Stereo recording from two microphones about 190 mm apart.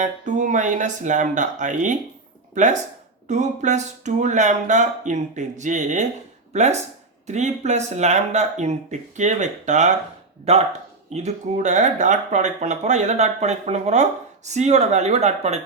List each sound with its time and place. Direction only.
0.0 s speech: 40° right (ahead or behind)
3.2 s speech: 40° right (ahead or behind)